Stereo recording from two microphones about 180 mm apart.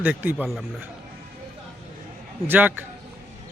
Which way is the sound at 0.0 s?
10° right (ahead or behind).